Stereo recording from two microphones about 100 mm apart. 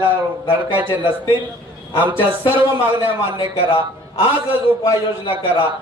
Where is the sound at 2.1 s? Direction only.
55° left (ahead or behind).